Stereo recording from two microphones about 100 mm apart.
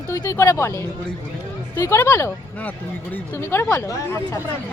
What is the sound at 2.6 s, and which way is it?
Speech, 15° left (ahead or behind).